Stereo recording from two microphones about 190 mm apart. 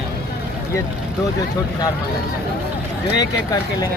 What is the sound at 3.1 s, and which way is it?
Speech, 20° left (ahead or behind).